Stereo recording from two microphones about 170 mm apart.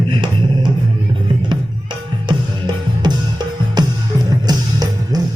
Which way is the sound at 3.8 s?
25° right (ahead or behind).